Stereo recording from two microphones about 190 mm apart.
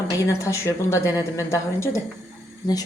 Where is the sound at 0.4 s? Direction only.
15° left (ahead or behind).